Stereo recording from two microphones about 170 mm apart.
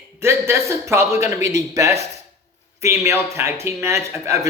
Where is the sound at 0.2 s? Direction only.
15° right (ahead or behind).